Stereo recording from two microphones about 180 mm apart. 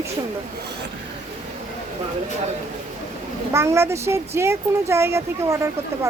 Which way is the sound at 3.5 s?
15° right (ahead or behind).